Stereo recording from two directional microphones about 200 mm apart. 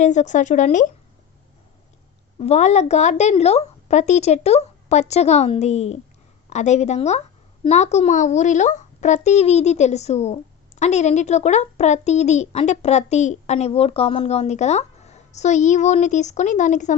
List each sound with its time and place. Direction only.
0.0 s a woman's voice: 35° left (ahead or behind)
2.4 s a woman's voice: 35° left (ahead or behind)